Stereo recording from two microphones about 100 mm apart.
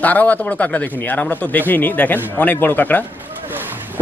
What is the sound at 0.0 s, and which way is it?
Speech, 15° left (ahead or behind).